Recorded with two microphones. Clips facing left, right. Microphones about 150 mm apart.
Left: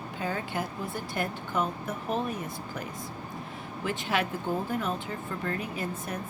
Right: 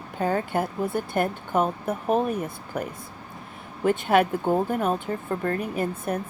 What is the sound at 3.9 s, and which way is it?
A woman's voice, 55° right (ahead or behind).